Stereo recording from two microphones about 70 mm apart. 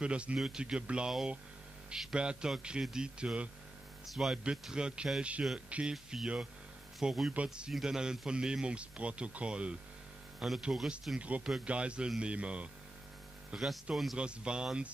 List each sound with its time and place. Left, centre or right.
0.0 s speech: centre
1.9 s a man's voice: centre
4.0 s speech: centre
10.6 s speech: centre
11.1 s speech: centre